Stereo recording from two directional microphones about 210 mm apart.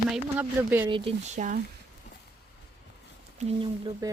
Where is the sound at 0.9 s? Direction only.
30° right (ahead or behind).